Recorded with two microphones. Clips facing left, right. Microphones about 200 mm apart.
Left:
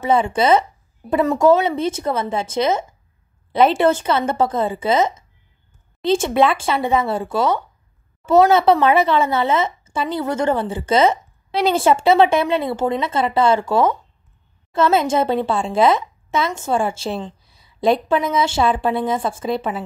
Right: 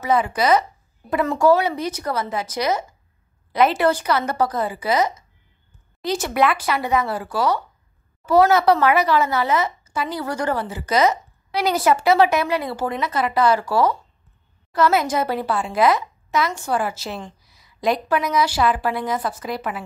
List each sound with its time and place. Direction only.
0.0 s a woman's voice: 25° left (ahead or behind)